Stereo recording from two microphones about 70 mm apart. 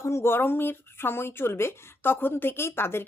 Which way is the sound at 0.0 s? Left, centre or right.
Left.